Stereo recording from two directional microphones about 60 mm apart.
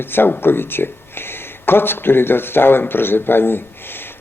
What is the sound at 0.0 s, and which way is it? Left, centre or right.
Speech, left.